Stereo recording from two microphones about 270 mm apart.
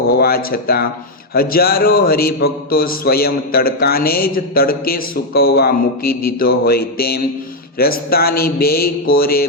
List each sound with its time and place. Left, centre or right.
0.1 s a man's voice: left